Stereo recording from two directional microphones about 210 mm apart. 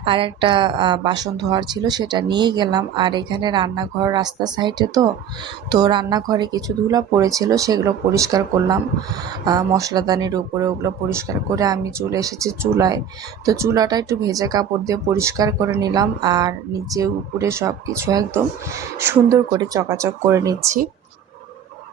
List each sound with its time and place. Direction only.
0.0 s a woman's voice: 25° right (ahead or behind)